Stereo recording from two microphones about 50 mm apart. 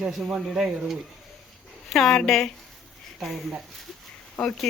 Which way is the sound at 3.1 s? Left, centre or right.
Centre.